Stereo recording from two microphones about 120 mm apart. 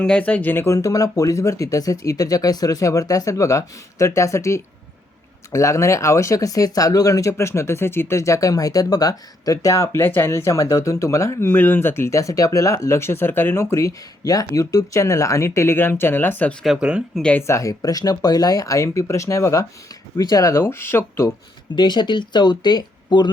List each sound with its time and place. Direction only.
0.0 s speech: 10° left (ahead or behind)
16.6 s speech: 5° right (ahead or behind)
17.4 s speech: 25° left (ahead or behind)
21.8 s speech: 40° left (ahead or behind)